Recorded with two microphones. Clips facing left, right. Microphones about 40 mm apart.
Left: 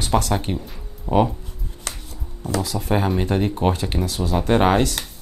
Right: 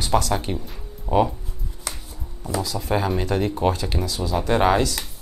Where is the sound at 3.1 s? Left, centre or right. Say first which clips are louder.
Left 1 dB; left.